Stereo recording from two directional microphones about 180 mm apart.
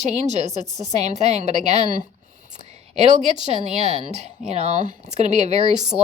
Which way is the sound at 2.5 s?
35° right (ahead or behind).